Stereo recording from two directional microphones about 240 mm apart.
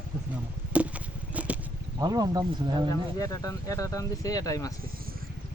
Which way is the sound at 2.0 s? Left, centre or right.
Centre.